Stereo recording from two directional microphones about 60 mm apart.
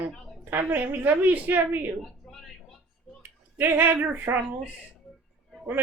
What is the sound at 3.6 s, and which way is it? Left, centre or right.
Speech, right.